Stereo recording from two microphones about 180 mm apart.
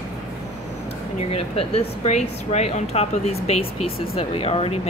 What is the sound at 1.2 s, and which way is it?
Speech, 35° left (ahead or behind).